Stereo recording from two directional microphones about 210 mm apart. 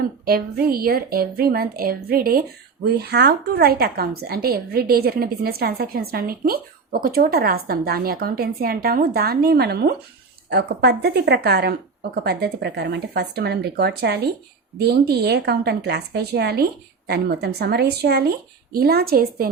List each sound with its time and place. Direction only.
0.3 s a woman's voice: 45° right (ahead or behind)